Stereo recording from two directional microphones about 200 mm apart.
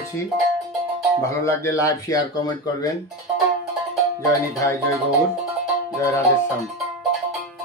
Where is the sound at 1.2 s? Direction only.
15° left (ahead or behind).